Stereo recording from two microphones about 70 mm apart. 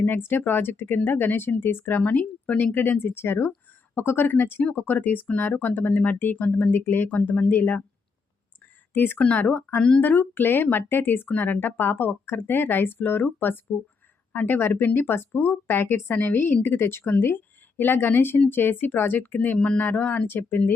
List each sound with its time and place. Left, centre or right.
0.0 s speech: left
8.9 s speech: left